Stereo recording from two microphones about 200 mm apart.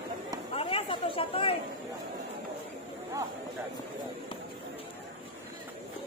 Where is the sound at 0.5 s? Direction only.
30° left (ahead or behind).